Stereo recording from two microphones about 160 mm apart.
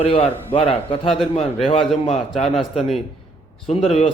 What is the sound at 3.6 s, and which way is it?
Speech, 40° left (ahead or behind).